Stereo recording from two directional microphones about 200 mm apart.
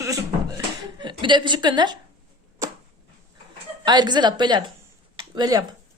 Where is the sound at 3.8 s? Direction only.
20° right (ahead or behind).